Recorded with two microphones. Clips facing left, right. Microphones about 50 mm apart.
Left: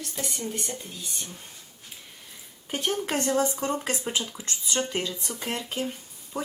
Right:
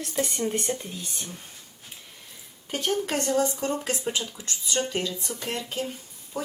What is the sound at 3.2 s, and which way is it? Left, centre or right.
Speech, left.